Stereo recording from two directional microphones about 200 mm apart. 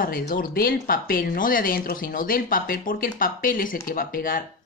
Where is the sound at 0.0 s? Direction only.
45° left (ahead or behind).